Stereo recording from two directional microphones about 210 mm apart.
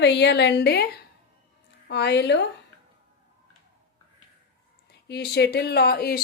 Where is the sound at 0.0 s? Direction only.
55° left (ahead or behind).